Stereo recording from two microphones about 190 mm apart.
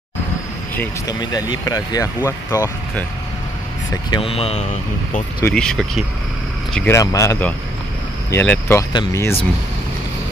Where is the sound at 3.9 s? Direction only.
25° left (ahead or behind).